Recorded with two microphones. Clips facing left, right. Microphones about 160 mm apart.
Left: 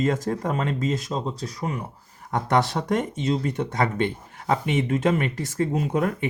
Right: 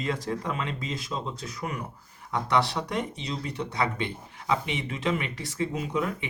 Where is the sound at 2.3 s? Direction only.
45° left (ahead or behind).